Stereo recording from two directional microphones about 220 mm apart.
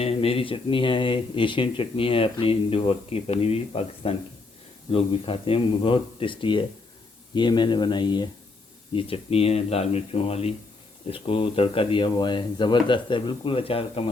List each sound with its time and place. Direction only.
0.0 s speech: 25° left (ahead or behind)